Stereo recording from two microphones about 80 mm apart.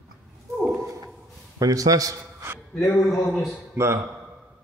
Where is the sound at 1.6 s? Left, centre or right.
Right.